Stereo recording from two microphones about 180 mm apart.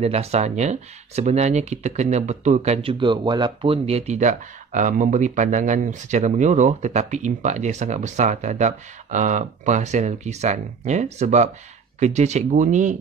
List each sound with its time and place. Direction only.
0.0 s speech: 35° right (ahead or behind)